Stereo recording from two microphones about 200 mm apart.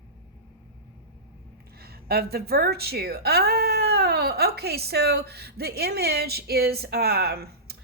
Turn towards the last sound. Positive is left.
turn(degrees=-50)  # may be behind; listen again after turning